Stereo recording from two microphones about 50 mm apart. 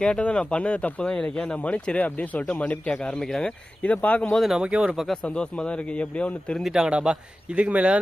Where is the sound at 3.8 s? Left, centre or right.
Left.